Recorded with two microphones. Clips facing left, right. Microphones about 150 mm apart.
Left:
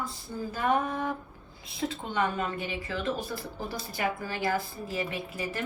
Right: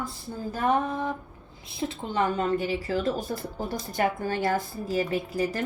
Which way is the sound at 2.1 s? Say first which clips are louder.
Right 6 dB; 35° right (ahead or behind).